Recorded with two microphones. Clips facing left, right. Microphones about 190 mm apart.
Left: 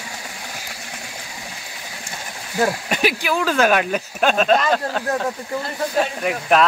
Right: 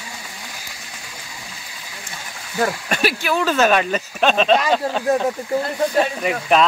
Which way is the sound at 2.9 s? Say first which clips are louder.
Even; 15° left (ahead or behind).